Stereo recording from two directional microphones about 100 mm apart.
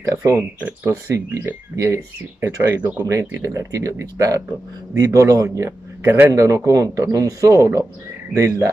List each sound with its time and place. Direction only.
0.0 s speech: 30° right (ahead or behind)
0.6 s speech: 15° right (ahead or behind)
1.0 s speech: 30° right (ahead or behind)
2.7 s speech: 20° right (ahead or behind)
3.1 s a man's voice: 35° right (ahead or behind)